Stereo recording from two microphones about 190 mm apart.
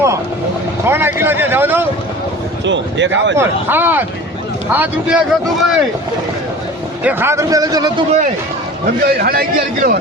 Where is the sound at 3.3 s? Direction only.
10° right (ahead or behind).